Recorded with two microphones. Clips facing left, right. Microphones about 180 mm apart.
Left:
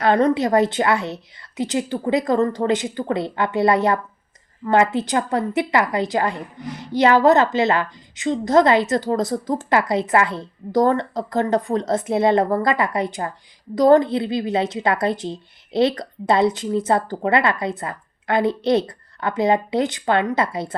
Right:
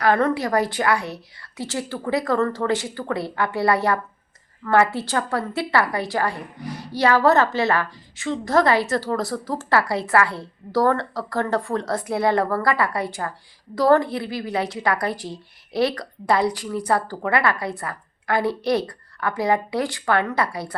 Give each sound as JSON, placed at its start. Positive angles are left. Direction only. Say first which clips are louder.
{"t": 0.0, "sound": "a woman's voice", "louder": "left 3 dB", "side_deg": 20}